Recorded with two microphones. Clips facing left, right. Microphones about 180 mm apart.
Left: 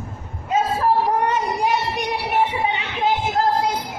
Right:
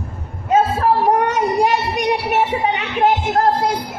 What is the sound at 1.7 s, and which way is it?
Music, 80° right.